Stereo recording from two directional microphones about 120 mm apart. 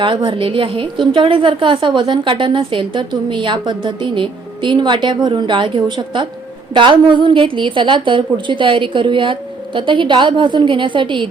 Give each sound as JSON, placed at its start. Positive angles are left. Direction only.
{"t": 0.0, "sound": "a woman's voice", "side_deg": -40}